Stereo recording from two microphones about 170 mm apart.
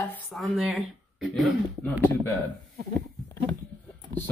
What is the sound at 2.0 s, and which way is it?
Speech, 10° left (ahead or behind).